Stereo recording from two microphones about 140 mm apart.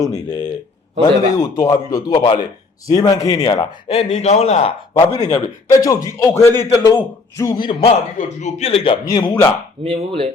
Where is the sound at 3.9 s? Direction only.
50° left (ahead or behind).